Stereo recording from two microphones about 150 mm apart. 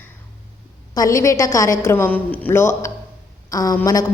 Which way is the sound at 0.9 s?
20° left (ahead or behind).